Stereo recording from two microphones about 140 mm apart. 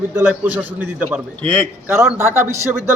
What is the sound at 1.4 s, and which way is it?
Speech, 10° left (ahead or behind).